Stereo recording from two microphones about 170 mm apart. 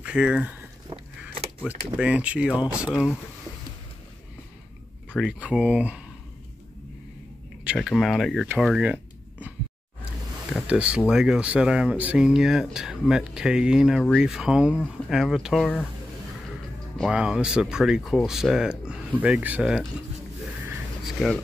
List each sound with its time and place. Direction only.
0.0 s speech: 5° right (ahead or behind)
0.8 s a sound: 35° right (ahead or behind)
2.0 s speech: 5° right (ahead or behind)
5.2 s speech: 5° right (ahead or behind)
7.6 s speech: 5° right (ahead or behind)
8.5 s a sound: 5° right (ahead or behind)
11.1 s speech: 5° right (ahead or behind)
17.0 s speech: 5° right (ahead or behind)
21.0 s a sound: centre (ahead or behind)